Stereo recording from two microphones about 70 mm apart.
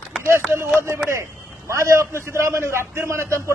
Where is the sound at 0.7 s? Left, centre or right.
Right.